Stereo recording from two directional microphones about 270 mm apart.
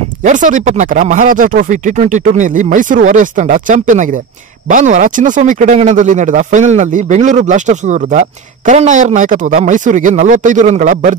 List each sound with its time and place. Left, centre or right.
0.2 s speech: right